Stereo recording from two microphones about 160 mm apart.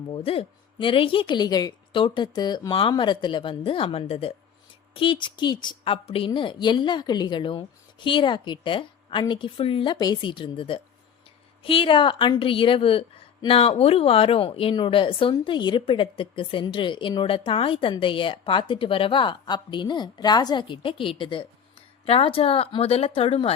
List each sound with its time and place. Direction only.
0.1 s a woman's voice: 35° left (ahead or behind)